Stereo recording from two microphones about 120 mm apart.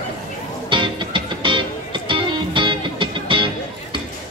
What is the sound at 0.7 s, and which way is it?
Music, 40° right (ahead or behind).